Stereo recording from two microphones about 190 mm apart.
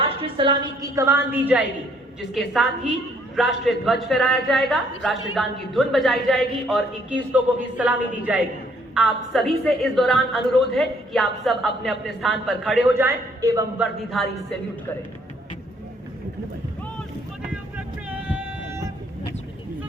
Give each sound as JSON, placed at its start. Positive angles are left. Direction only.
{"t": 0.0, "sound": "a woman's voice", "side_deg": -30}
{"t": 12.9, "sound": "a woman's voice", "side_deg": -10}
{"t": 13.7, "sound": "a woman's voice", "side_deg": 0}
{"t": 17.7, "sound": "vehicle", "side_deg": -5}